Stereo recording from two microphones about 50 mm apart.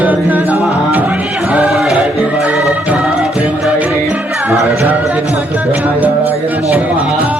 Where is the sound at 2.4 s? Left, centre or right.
Right.